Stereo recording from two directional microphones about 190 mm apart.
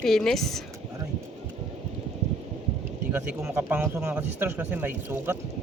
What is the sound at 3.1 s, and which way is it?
Speech, 10° right (ahead or behind).